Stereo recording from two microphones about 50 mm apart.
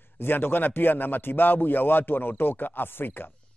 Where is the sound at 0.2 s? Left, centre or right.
Left.